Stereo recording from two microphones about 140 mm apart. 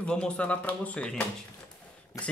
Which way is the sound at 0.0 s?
5° left (ahead or behind).